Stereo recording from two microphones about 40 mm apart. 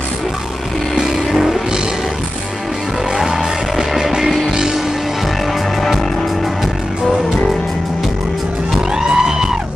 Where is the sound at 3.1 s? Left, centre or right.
Centre.